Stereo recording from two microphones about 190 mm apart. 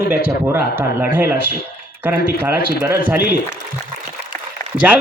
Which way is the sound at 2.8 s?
10° right (ahead or behind).